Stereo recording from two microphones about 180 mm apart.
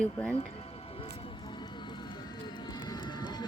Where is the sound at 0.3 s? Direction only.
35° left (ahead or behind).